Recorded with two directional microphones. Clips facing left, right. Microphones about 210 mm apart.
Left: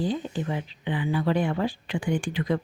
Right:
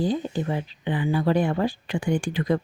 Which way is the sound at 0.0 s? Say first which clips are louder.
Right 3 dB; 40° right (ahead or behind).